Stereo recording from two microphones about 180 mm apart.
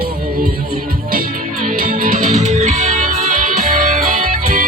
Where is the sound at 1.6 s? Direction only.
50° right (ahead or behind).